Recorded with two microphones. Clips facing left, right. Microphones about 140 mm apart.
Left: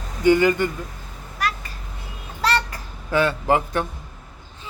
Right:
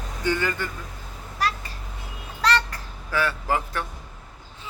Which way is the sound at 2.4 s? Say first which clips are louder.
Left 1 dB; 5° left (ahead or behind).